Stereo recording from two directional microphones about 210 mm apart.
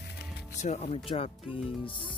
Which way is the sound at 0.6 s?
30° left (ahead or behind).